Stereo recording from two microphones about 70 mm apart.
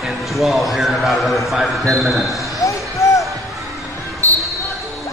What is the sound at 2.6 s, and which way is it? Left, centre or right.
Basketball bounce, left.